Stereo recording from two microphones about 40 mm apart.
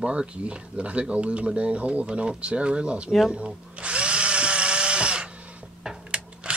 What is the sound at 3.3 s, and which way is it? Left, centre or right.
Drill, right.